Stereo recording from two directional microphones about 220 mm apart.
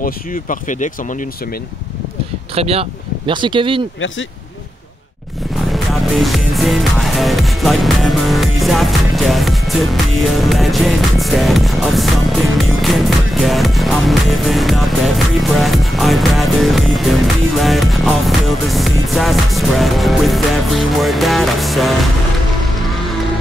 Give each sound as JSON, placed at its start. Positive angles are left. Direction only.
{"t": 0.0, "sound": "speech", "side_deg": 40}
{"t": 2.5, "sound": "speech", "side_deg": -25}
{"t": 5.6, "sound": "speech", "side_deg": 0}
{"t": 8.5, "sound": "music", "side_deg": 0}